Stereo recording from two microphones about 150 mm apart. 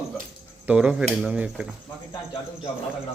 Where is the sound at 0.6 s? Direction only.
10° right (ahead or behind).